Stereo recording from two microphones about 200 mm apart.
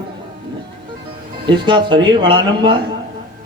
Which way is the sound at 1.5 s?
25° right (ahead or behind).